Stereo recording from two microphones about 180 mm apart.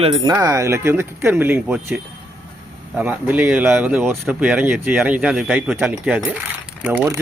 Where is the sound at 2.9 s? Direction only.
10° right (ahead or behind).